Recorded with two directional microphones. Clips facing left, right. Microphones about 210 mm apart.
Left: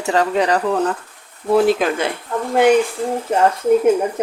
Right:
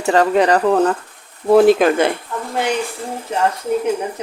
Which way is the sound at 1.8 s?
55° right (ahead or behind).